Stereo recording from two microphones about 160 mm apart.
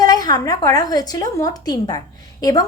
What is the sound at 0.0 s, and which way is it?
A woman's voice, 25° left (ahead or behind).